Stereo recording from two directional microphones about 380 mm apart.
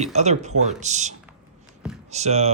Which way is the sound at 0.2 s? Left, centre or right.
Centre.